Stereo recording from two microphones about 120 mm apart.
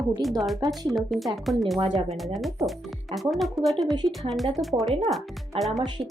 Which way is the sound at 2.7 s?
Centre (ahead or behind).